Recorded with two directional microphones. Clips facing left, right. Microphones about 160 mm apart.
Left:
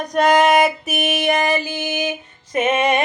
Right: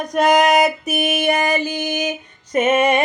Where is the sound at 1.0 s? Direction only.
45° right (ahead or behind).